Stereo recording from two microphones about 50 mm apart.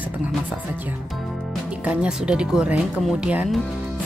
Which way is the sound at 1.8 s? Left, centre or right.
Centre.